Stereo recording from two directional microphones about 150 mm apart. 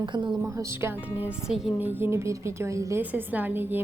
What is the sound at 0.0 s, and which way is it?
Speech, 30° right (ahead or behind).